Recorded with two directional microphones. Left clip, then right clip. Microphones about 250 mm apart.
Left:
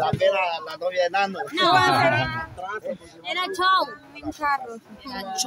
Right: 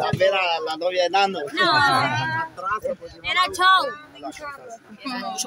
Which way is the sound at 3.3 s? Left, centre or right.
Centre.